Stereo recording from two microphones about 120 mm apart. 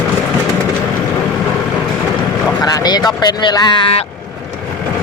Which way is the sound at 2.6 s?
35° left (ahead or behind).